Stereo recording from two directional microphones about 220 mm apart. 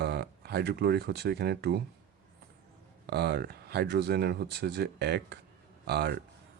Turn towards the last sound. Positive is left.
turn(degrees=-50)  # may be behind; listen again after turning